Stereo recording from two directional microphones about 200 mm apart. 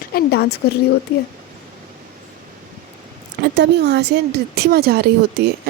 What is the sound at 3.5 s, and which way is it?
Speech, 60° right (ahead or behind).